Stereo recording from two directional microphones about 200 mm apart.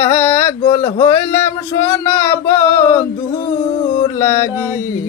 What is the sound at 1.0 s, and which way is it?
Male singing, 10° left (ahead or behind).